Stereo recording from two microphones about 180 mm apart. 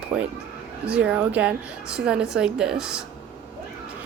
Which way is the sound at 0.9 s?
5° right (ahead or behind).